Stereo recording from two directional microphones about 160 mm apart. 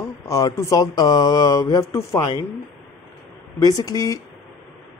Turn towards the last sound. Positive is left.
turn(degrees=25)  # may be behind; listen again after turning